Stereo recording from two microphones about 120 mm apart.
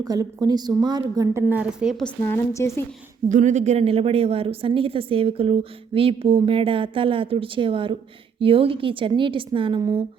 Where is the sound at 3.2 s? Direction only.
90° right.